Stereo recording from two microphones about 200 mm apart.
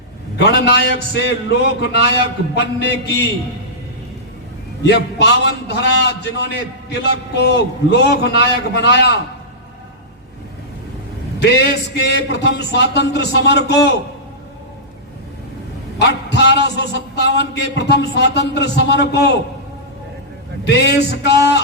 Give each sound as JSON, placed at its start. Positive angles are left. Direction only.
{"t": 0.3, "sound": "a man's voice", "side_deg": 60}
{"t": 4.9, "sound": "a man's voice", "side_deg": 60}
{"t": 11.3, "sound": "a man's voice", "side_deg": 55}
{"t": 16.0, "sound": "a sound", "side_deg": 55}
{"t": 16.6, "sound": "a man's voice", "side_deg": 60}
{"t": 20.7, "sound": "a man's voice", "side_deg": 55}